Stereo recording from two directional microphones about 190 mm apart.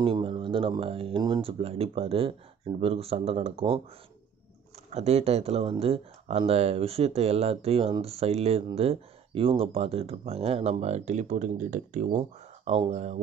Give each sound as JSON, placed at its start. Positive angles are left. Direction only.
{"t": 0.0, "sound": "speech", "side_deg": -25}
{"t": 4.9, "sound": "speech", "side_deg": -35}
{"t": 12.2, "sound": "speech", "side_deg": -30}